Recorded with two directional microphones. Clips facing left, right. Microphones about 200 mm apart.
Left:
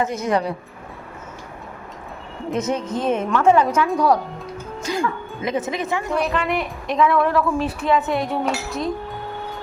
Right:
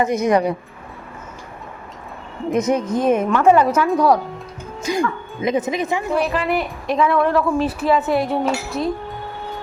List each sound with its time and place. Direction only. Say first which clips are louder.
0.0 s a woman's voice: right 4 dB; 15° right (ahead or behind)
2.5 s a woman's voice: right 5 dB; 10° right (ahead or behind)
6.1 s a woman's voice: right 2 dB; 5° right (ahead or behind)